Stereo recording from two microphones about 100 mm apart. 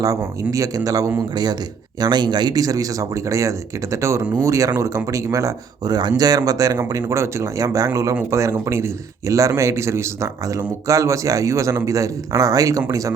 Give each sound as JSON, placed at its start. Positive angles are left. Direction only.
{"t": 0.0, "sound": "a man's voice", "side_deg": -35}